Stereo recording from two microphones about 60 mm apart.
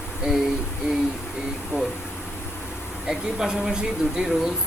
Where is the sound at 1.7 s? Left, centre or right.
Left.